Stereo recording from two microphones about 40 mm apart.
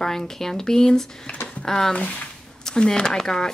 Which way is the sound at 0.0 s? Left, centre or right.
Centre.